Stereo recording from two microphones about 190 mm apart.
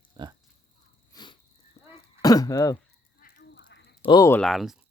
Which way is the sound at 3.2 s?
45° left (ahead or behind).